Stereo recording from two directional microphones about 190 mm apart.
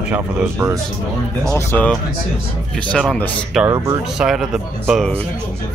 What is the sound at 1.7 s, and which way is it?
Speech, 10° left (ahead or behind).